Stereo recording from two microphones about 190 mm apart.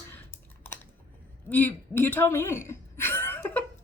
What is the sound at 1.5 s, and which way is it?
Speech, 10° left (ahead or behind).